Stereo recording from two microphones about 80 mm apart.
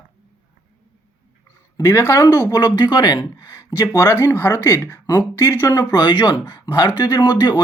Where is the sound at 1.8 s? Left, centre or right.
Left.